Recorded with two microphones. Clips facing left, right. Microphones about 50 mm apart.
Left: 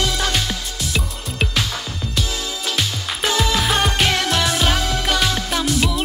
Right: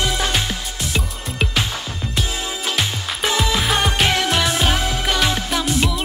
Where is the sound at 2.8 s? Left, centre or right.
Centre.